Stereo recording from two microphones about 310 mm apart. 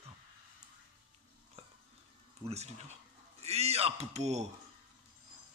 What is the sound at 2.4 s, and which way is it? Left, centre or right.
A man's voice, right.